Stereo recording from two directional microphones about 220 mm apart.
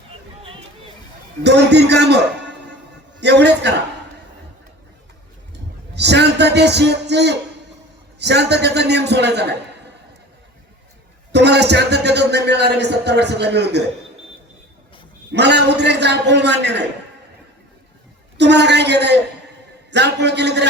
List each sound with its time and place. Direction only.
1.5 s a man's voice: 50° right (ahead or behind)
3.2 s a sound: 50° right (ahead or behind)
5.9 s a sound: 50° right (ahead or behind)
8.2 s a man's voice: 50° right (ahead or behind)
11.3 s a man's voice: 50° right (ahead or behind)
15.3 s a man's voice: 50° right (ahead or behind)
18.3 s a man's voice: 50° right (ahead or behind)